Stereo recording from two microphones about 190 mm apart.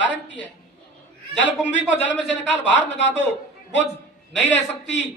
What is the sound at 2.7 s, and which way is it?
A man's voice, 70° left (ahead or behind).